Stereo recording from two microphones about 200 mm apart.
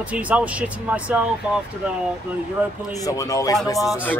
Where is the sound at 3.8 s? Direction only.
Centre (ahead or behind).